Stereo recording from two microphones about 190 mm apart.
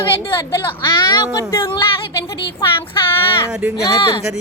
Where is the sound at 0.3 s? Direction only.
20° left (ahead or behind).